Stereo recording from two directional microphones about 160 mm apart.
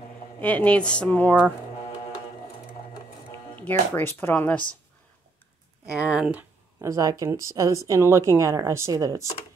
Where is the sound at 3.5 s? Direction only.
10° left (ahead or behind).